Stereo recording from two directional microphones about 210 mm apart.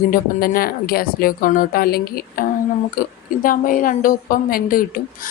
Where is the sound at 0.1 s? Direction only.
45° left (ahead or behind).